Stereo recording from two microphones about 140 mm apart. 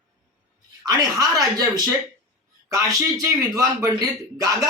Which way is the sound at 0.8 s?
25° right (ahead or behind).